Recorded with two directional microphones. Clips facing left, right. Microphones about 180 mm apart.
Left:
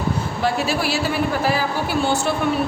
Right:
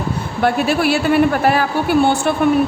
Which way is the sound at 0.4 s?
55° right (ahead or behind).